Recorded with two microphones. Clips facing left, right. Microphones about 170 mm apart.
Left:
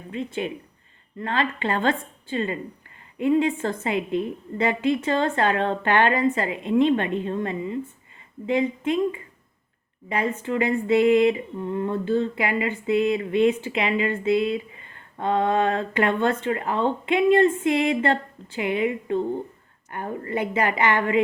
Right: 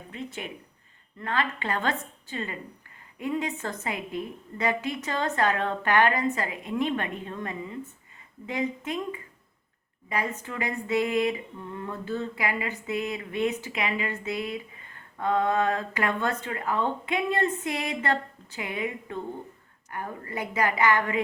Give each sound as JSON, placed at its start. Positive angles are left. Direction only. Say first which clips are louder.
{"t": 1.2, "sound": "speech", "louder": "left 4 dB", "side_deg": 25}
{"t": 10.1, "sound": "speech", "louder": "left 6 dB", "side_deg": 25}